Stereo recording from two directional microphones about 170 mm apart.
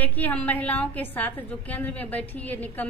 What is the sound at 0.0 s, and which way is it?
A woman's voice, 10° left (ahead or behind).